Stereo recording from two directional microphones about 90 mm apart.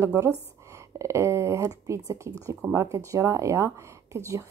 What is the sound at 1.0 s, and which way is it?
Speech, 30° right (ahead or behind).